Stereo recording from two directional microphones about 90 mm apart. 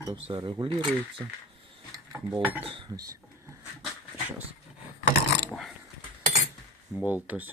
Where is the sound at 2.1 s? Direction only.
25° right (ahead or behind).